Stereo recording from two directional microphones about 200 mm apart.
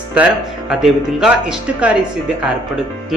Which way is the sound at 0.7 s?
5° right (ahead or behind).